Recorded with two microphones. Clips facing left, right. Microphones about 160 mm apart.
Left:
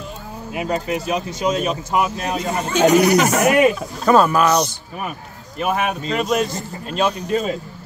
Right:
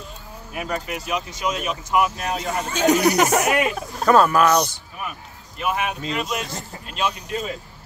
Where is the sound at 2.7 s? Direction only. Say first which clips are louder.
Left 4 dB; 70° left (ahead or behind).